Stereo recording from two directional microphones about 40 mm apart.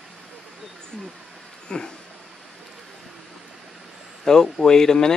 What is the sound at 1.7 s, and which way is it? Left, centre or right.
Speech, left.